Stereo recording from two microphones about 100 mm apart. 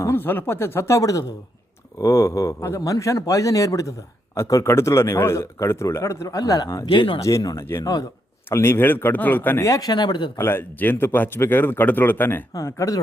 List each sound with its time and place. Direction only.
0.0 s a man's voice: 25° left (ahead or behind)
6.8 s speech: 60° left (ahead or behind)
7.2 s a man's voice: 35° left (ahead or behind)
7.8 s speech: 45° left (ahead or behind)
8.4 s a man's voice: 25° left (ahead or behind)
9.6 s speech: 35° left (ahead or behind)
10.3 s a man's voice: 20° left (ahead or behind)
12.5 s a man's voice: 30° left (ahead or behind)